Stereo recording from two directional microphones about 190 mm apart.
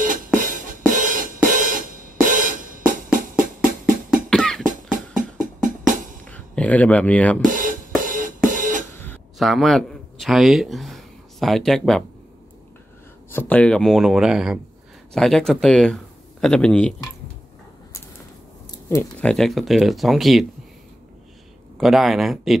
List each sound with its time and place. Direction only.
0.0 s music: 45° right (ahead or behind)
4.1 s music: centre (ahead or behind)
4.9 s music: 45° right (ahead or behind)
6.2 s speech: 5° left (ahead or behind)
7.4 s drum kit: 45° right (ahead or behind)
8.9 s a sound: 10° left (ahead or behind)
9.4 s a man's voice: centre (ahead or behind)
13.3 s speech: 10° left (ahead or behind)
19.2 s speech: centre (ahead or behind)
21.7 s speech: centre (ahead or behind)